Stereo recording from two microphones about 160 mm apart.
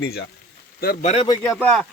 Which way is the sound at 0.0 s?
90° left.